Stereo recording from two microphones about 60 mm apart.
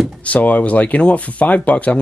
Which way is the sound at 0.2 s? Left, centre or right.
Left.